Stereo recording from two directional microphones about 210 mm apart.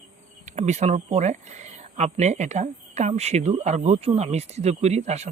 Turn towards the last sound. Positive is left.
turn(degrees=-30)  # may be behind; listen again after turning